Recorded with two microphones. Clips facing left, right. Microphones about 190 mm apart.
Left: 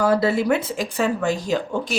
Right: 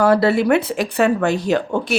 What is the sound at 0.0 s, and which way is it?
Speech, 65° right (ahead or behind).